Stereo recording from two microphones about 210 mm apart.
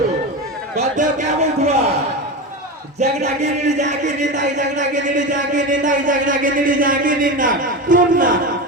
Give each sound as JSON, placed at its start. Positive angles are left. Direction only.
{"t": 0.8, "sound": "speech", "side_deg": -35}
{"t": 3.0, "sound": "speech", "side_deg": -30}